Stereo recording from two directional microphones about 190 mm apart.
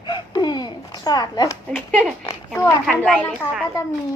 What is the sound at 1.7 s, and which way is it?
Speech, 5° left (ahead or behind).